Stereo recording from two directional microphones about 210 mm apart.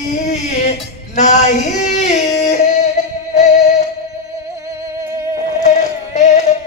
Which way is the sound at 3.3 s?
35° left (ahead or behind).